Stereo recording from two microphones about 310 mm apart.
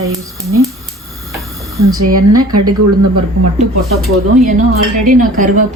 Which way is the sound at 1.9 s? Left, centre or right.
Right.